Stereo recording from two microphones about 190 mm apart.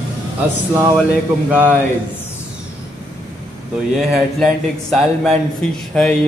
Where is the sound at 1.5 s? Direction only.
10° right (ahead or behind).